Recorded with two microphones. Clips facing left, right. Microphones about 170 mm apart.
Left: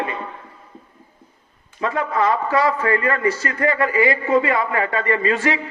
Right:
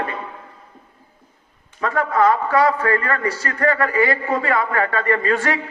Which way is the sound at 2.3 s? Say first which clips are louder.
Right 2 dB; 20° left (ahead or behind).